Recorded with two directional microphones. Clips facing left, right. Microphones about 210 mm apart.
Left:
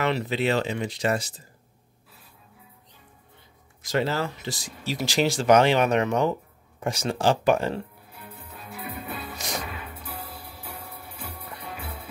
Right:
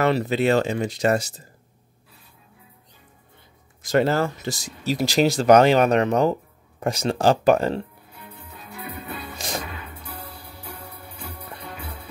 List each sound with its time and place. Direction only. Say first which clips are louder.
0.0 s speech: right 5 dB; 45° right (ahead or behind)
3.8 s speech: right 6 dB; 50° right (ahead or behind)
8.1 s music: right 1 dB; 10° left (ahead or behind)